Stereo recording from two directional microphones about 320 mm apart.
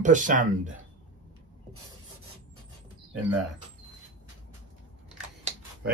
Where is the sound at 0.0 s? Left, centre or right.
Right.